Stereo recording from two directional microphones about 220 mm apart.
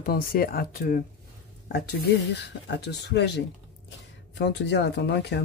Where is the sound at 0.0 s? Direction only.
40° left (ahead or behind).